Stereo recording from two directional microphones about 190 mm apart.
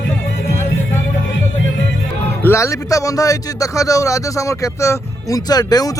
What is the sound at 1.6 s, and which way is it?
Music, 75° left (ahead or behind).